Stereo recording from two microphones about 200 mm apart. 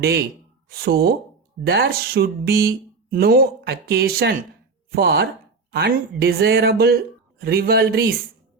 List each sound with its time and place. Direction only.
0.0 s speech: 60° right (ahead or behind)